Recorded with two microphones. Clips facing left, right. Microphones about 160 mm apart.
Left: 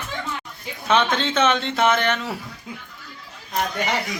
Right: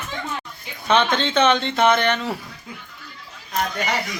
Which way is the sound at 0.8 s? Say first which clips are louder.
Right 1 dB; centre (ahead or behind).